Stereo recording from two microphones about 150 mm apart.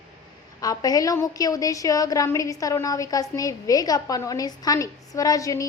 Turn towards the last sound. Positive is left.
turn(degrees=20)  # may be behind; listen again after turning